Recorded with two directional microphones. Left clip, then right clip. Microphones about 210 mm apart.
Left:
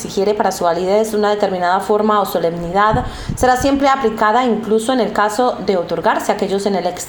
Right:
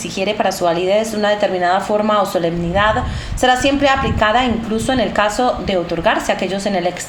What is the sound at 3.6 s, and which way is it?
Speech, 25° left (ahead or behind).